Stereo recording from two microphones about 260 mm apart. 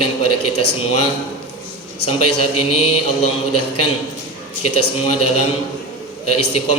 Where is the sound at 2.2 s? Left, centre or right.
Left.